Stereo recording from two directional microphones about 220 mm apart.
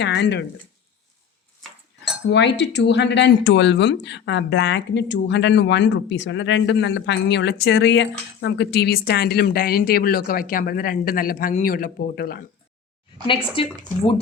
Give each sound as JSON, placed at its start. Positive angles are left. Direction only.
{"t": 0.0, "sound": "speech", "side_deg": 55}
{"t": 2.3, "sound": "speech", "side_deg": 50}
{"t": 13.2, "sound": "speech", "side_deg": 25}